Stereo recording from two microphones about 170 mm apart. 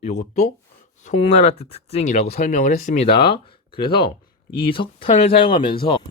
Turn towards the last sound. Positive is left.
turn(degrees=30)  # may be behind; listen again after turning